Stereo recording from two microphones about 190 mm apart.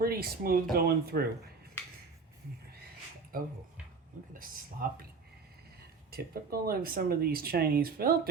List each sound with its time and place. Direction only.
0.0 s speech: 50° right (ahead or behind)
3.3 s speech: 50° right (ahead or behind)
6.1 s speech: 55° right (ahead or behind)